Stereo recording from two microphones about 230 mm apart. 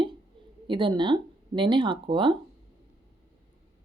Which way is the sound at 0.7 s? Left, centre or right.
Right.